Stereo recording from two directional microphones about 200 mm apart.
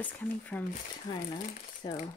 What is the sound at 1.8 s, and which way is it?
Speech, 25° left (ahead or behind).